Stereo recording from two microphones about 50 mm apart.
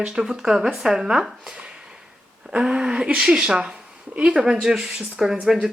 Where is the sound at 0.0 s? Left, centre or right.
Centre.